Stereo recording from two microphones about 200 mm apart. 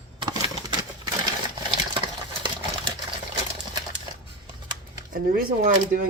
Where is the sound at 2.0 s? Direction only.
20° right (ahead or behind).